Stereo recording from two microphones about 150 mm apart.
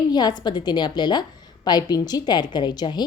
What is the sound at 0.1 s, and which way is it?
A woman's voice, 30° left (ahead or behind).